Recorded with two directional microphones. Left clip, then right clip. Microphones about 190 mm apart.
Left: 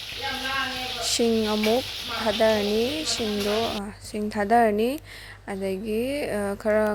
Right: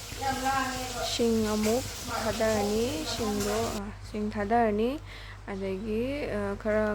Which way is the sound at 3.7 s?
25° left (ahead or behind).